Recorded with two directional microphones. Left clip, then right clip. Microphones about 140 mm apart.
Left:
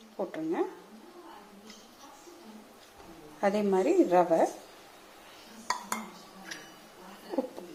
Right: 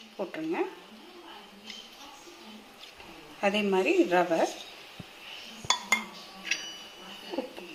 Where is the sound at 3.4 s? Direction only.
5° left (ahead or behind).